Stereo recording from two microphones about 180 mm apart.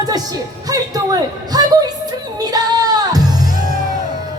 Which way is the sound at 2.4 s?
20° right (ahead or behind).